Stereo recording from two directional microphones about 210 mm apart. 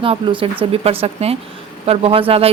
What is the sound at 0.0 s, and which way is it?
Speech, 25° right (ahead or behind).